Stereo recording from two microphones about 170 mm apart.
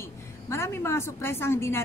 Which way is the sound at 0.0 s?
15° left (ahead or behind).